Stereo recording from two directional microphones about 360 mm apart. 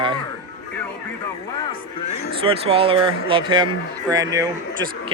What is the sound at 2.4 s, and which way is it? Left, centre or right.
Speech, centre.